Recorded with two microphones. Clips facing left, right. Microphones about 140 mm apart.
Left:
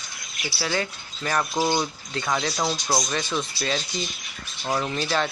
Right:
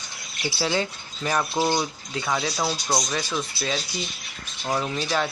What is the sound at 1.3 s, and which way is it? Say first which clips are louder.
Speech: even; 10° right (ahead or behind).